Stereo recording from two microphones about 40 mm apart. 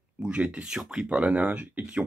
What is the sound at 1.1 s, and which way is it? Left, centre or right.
Speech, right.